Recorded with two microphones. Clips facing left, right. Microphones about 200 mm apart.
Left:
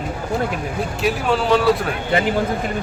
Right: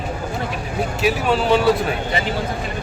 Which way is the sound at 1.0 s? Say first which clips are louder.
Right 1 dB; centre (ahead or behind).